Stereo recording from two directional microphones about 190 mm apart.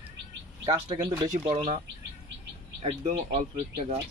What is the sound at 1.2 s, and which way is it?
Speech, 40° right (ahead or behind).